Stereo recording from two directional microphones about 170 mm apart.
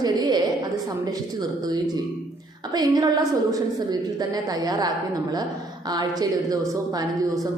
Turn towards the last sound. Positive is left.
turn(degrees=-20)  # may be behind; listen again after turning